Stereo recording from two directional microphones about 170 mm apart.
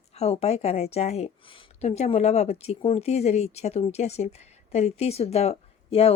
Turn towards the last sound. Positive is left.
turn(degrees=35)  # may be behind; listen again after turning